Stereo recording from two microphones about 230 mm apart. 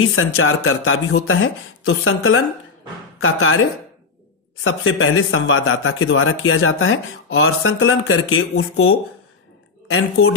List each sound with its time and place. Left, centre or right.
0.1 s speech: left
4.6 s speech: left